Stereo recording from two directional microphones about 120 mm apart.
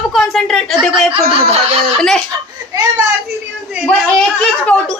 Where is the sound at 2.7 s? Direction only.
30° right (ahead or behind).